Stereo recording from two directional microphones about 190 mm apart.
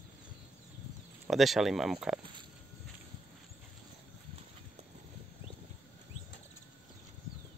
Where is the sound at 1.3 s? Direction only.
Centre (ahead or behind).